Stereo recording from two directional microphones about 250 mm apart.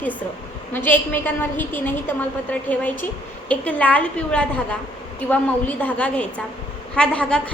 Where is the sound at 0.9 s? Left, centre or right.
Centre.